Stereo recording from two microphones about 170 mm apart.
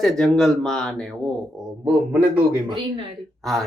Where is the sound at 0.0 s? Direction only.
Centre (ahead or behind).